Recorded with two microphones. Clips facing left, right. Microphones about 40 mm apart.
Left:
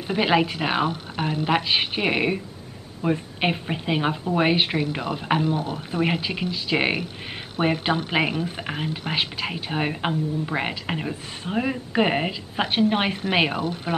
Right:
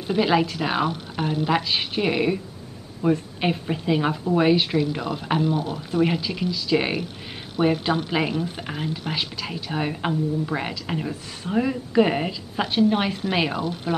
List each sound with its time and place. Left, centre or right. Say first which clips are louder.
0.2 s speech: even; left
1.2 s speech: right 1 dB; left
1.5 s speech: left 1 dB; left